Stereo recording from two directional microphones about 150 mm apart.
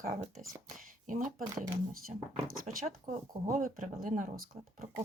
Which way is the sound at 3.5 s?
65° right (ahead or behind).